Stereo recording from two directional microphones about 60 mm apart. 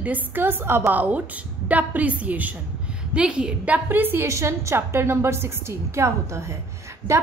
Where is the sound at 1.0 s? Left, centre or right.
Right.